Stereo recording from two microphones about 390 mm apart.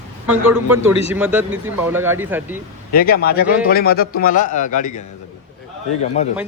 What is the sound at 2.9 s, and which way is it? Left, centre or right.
Speech, left.